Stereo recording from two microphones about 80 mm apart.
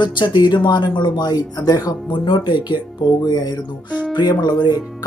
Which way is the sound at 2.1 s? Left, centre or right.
Left.